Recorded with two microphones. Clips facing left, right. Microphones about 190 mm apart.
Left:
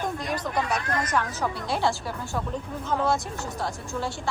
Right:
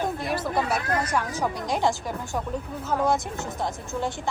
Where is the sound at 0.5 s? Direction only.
10° right (ahead or behind).